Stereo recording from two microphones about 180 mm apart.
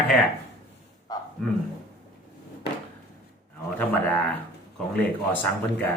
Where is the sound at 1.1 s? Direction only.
20° left (ahead or behind).